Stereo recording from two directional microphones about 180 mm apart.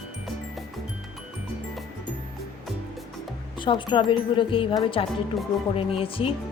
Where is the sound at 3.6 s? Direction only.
25° left (ahead or behind).